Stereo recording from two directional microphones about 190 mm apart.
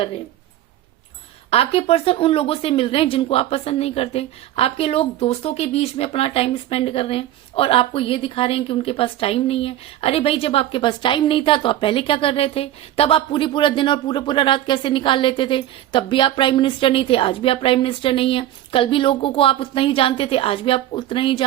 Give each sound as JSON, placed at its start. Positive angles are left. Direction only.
{"t": 1.5, "sound": "speech", "side_deg": 30}